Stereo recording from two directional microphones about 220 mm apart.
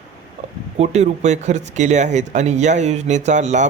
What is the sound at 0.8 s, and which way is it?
A man's voice, 30° right (ahead or behind).